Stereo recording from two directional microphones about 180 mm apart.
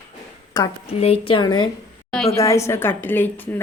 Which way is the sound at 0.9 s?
35° left (ahead or behind).